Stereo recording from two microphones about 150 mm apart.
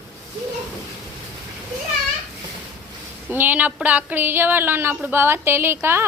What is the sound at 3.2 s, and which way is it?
A woman's voice, 15° right (ahead or behind).